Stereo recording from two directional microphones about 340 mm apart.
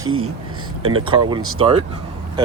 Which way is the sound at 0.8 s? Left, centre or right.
Centre.